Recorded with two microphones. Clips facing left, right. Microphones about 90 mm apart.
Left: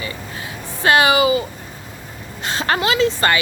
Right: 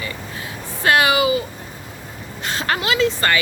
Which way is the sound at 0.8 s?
25° left (ahead or behind).